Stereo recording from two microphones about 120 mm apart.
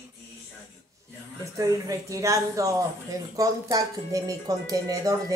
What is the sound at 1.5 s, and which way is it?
Speech, 30° right (ahead or behind).